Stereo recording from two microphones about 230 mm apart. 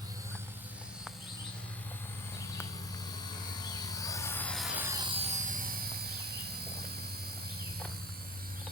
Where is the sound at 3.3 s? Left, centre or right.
Centre.